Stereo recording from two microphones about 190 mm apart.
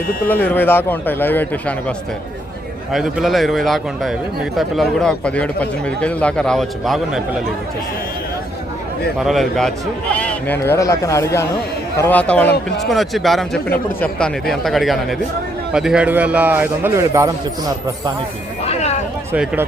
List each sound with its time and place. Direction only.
0.3 s a man's voice: 10° left (ahead or behind)
2.9 s a man's voice: centre (ahead or behind)
9.1 s a man's voice: centre (ahead or behind); by 17.3 s 15° right (ahead or behind)
18.6 s vehicle: 35° left (ahead or behind)
19.3 s a man's voice: 10° right (ahead or behind)